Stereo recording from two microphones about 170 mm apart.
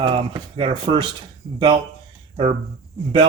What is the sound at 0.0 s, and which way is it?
Speech, 30° right (ahead or behind).